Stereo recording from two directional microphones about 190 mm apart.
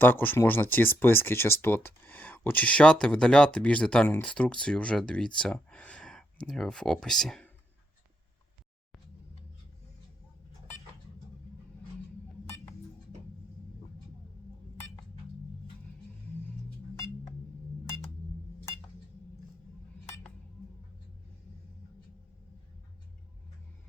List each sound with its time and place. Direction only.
0.0 s speech: 10° left (ahead or behind)